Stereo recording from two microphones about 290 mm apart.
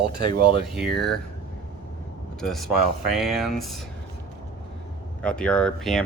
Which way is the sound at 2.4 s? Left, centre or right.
Centre.